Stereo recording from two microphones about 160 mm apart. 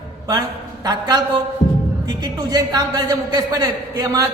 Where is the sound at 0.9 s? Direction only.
25° right (ahead or behind).